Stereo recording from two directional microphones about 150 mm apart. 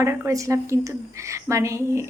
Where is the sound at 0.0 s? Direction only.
20° right (ahead or behind).